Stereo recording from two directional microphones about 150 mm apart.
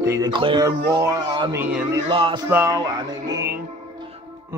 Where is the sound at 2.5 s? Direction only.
20° right (ahead or behind).